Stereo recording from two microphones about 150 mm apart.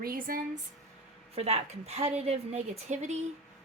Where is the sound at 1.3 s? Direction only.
45° right (ahead or behind).